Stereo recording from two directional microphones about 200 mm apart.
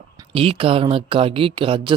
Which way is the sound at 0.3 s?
30° right (ahead or behind).